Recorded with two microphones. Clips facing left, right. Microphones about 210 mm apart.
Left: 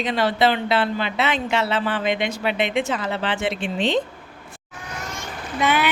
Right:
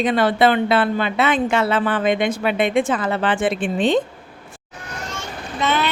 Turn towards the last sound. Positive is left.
turn(degrees=10)  # may be behind; listen again after turning